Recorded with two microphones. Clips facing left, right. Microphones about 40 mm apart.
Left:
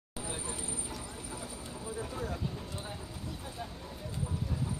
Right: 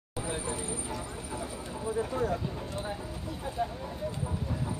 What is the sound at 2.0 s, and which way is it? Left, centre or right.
Speech, right.